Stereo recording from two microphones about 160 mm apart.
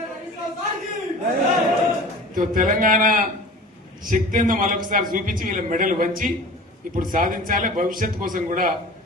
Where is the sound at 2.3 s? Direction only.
60° right (ahead or behind).